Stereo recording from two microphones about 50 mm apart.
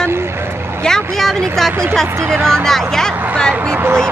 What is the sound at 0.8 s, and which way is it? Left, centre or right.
Speech, centre.